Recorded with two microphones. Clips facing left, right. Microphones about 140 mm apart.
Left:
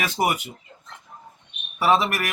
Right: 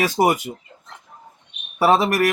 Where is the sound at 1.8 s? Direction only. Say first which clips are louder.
Right 4 dB; 40° right (ahead or behind).